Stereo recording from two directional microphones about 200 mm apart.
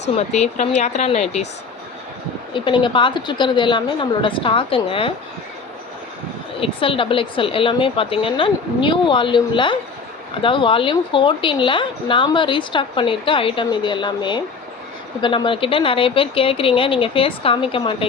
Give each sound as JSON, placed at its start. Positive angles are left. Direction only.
{"t": 0.2, "sound": "speech", "side_deg": 35}
{"t": 2.5, "sound": "a woman's voice", "side_deg": 25}
{"t": 6.6, "sound": "a woman's voice", "side_deg": 25}